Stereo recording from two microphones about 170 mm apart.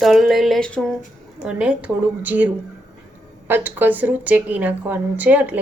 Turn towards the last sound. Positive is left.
turn(degrees=-10)  # may be behind; listen again after turning